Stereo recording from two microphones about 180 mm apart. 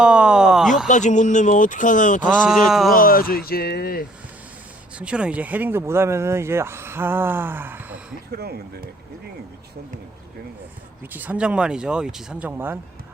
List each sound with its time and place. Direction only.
0.0 s a sound: 5° right (ahead or behind)
0.9 s speech: 45° left (ahead or behind)
2.6 s speech: centre (ahead or behind)
2.9 s speech: 50° left (ahead or behind)
4.9 s speech: 5° right (ahead or behind)
8.4 s speech: 60° right (ahead or behind)
11.1 s speech: 10° right (ahead or behind)